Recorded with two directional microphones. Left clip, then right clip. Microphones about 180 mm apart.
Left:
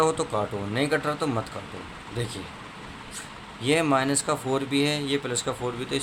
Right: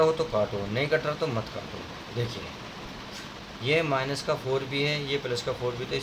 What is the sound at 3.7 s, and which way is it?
Speech, 35° left (ahead or behind).